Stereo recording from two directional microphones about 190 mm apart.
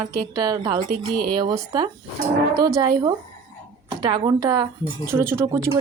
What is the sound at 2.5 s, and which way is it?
A woman's voice, 20° right (ahead or behind).